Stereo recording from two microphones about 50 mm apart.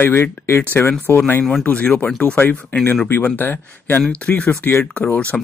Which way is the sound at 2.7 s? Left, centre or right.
Left.